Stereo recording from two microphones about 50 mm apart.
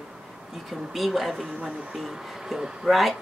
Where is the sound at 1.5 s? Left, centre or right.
Right.